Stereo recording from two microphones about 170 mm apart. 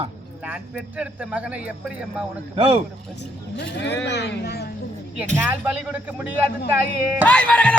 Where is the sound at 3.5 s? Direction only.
80° left.